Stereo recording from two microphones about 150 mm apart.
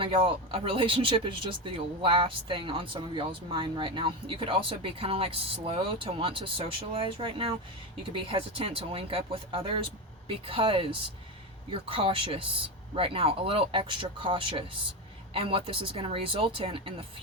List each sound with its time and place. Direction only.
0.0 s speech: 35° right (ahead or behind)